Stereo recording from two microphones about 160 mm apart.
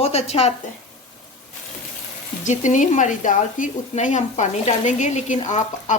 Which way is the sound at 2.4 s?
50° left (ahead or behind).